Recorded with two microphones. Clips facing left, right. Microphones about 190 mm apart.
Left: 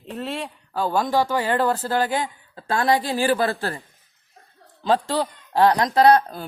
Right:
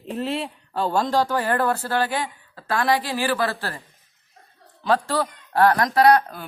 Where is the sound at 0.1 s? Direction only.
Centre (ahead or behind); by 3.8 s 25° left (ahead or behind).